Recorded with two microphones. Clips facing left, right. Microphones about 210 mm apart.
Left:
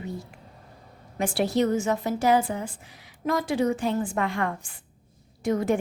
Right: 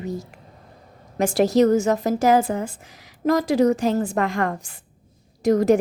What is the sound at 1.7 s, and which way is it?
A woman's voice, 40° right (ahead or behind).